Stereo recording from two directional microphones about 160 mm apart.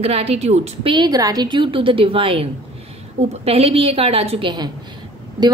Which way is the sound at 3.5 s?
40° right (ahead or behind).